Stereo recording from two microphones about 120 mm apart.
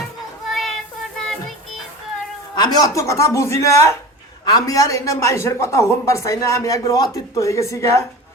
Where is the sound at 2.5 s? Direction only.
35° left (ahead or behind).